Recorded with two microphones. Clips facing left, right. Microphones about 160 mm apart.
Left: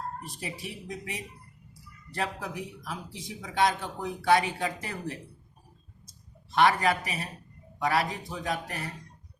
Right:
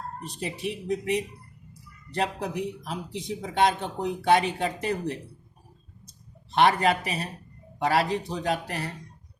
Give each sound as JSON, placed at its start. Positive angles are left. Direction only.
{"t": 0.4, "sound": "speech", "side_deg": -20}
{"t": 6.5, "sound": "speech", "side_deg": -25}